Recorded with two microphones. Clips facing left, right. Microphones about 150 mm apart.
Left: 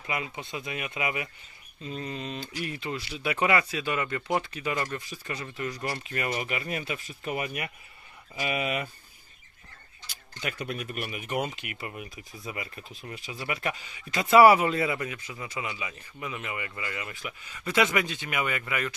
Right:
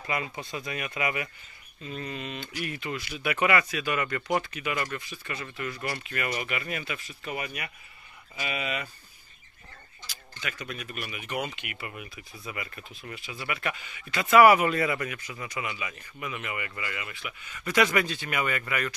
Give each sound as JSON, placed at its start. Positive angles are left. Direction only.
{"t": 0.0, "sound": "speech", "side_deg": 15}
{"t": 2.0, "sound": "speech", "side_deg": 30}
{"t": 5.1, "sound": "speech", "side_deg": 35}
{"t": 11.0, "sound": "speech", "side_deg": 45}